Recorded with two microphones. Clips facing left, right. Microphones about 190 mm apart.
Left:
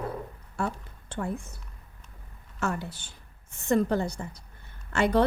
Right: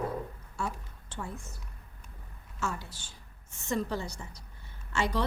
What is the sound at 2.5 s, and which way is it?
A woman's voice, 60° left (ahead or behind).